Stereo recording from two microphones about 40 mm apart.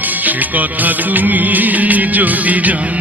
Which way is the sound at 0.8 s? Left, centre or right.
Right.